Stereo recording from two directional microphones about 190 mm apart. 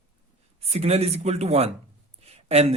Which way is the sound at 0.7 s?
35° right (ahead or behind).